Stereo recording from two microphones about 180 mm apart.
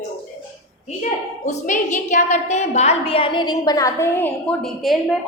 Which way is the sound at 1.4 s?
45° left (ahead or behind).